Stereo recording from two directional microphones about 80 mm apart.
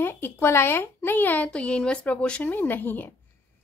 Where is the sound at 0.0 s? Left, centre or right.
Left; by 2.5 s centre.